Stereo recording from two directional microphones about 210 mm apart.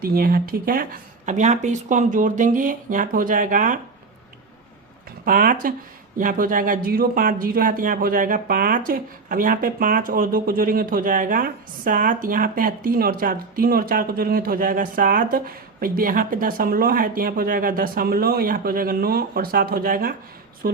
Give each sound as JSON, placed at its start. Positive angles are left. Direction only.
{"t": 0.0, "sound": "speech", "side_deg": -45}
{"t": 5.2, "sound": "speech", "side_deg": -40}